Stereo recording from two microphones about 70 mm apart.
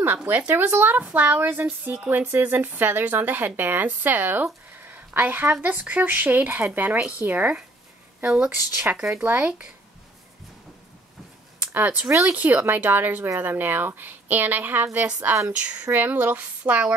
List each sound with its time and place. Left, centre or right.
0.2 s speech: centre
0.5 s speech: right
8.9 s speech: centre
11.6 s speech: right